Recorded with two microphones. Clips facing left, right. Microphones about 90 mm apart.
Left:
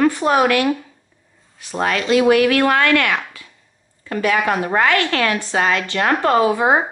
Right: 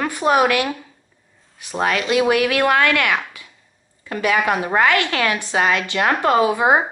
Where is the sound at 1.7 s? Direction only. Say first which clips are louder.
Left 2 dB; 10° right (ahead or behind).